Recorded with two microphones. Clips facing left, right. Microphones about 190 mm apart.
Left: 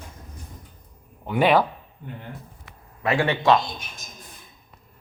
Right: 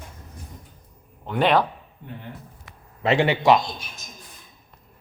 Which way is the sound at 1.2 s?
10° left (ahead or behind).